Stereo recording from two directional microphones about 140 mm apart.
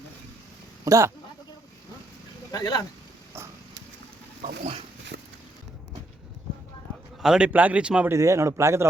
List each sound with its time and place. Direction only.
0.9 s speech: 20° right (ahead or behind)
2.5 s speech: 25° left (ahead or behind)
7.2 s speech: 5° right (ahead or behind)
8.1 s speech: 20° right (ahead or behind)